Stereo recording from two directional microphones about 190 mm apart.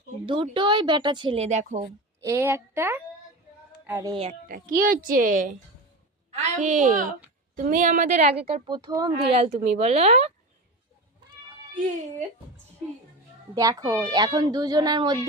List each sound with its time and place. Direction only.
0.5 s speech: 25° right (ahead or behind)
2.2 s a woman's voice: 15° right (ahead or behind)
4.1 s a child's voice: 30° right (ahead or behind)
4.4 s a child's voice: 45° right (ahead or behind); by 9.4 s 20° right (ahead or behind)
9.4 s a child's voice: 35° right (ahead or behind)
13.6 s speech: 20° right (ahead or behind)